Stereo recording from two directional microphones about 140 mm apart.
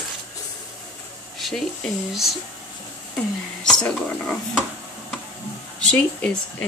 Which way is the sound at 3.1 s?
5° left (ahead or behind).